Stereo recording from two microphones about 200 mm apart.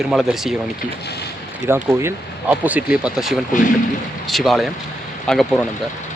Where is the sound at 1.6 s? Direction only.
10° right (ahead or behind).